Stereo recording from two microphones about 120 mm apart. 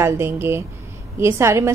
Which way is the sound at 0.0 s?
20° right (ahead or behind).